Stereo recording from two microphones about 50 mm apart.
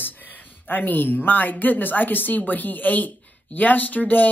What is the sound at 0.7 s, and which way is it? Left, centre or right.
Speech, left.